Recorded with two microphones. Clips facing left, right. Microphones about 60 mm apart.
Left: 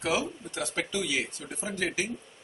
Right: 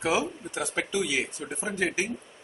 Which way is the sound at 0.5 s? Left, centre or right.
Centre.